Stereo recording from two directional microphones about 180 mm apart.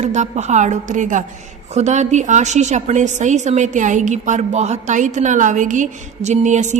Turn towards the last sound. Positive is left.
turn(degrees=-40)  # may be behind; listen again after turning